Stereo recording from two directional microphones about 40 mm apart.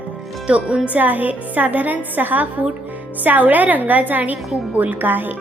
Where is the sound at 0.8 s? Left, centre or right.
Right.